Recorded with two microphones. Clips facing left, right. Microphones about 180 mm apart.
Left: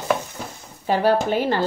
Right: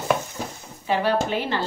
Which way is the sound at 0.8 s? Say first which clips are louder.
Left 3 dB; 40° left (ahead or behind).